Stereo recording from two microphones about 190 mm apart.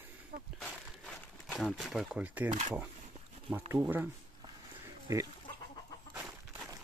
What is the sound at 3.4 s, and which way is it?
Speech, 10° right (ahead or behind).